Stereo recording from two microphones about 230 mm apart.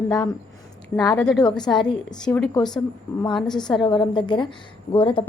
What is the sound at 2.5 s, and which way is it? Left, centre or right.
A woman's voice, centre.